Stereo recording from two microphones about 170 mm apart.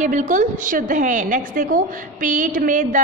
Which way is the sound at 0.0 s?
45° right (ahead or behind).